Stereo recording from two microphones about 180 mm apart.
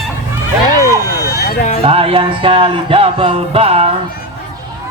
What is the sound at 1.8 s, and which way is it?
Music, 30° right (ahead or behind).